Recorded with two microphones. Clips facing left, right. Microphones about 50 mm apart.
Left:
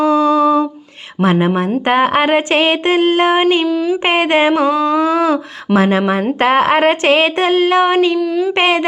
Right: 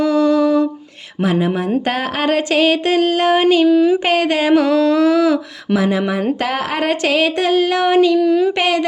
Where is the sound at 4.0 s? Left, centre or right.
Left.